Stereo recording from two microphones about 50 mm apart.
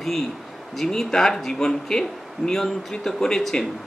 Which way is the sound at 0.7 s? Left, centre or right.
Centre.